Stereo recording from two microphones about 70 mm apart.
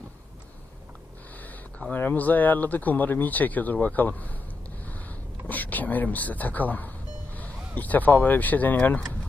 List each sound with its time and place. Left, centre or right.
1.9 s speech: left
4.9 s a sound: left
5.5 s speech: left